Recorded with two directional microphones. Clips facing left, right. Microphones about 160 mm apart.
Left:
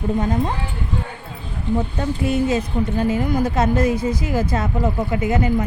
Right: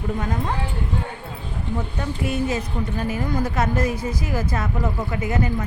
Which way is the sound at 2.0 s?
25° left (ahead or behind).